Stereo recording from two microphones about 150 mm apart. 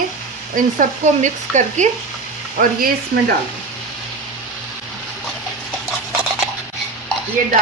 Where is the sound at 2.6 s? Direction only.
75° right (ahead or behind).